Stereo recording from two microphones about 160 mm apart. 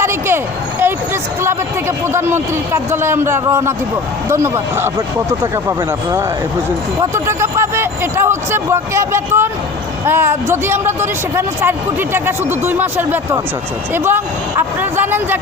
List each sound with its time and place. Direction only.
0.0 s speech: 15° right (ahead or behind)
2.1 s a man's voice: 15° right (ahead or behind)